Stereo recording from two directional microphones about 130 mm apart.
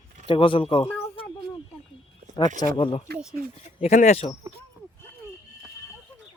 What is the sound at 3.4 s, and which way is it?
Speech, 90° right.